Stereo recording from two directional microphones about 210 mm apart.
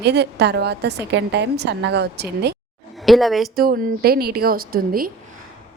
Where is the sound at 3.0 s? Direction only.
Centre (ahead or behind).